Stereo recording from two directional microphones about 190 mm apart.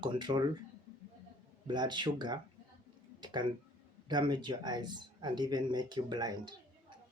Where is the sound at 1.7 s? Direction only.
25° right (ahead or behind).